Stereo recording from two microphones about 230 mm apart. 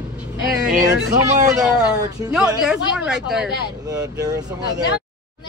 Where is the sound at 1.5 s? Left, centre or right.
Centre.